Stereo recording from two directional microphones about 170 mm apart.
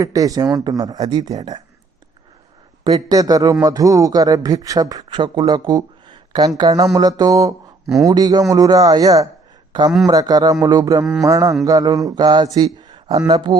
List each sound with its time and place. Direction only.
0.0 s speech: 20° right (ahead or behind)
2.8 s speech: 25° right (ahead or behind)